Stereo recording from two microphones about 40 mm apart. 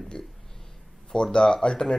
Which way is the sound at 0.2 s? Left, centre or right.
Centre.